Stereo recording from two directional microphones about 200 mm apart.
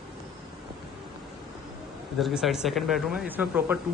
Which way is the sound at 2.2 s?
Centre (ahead or behind).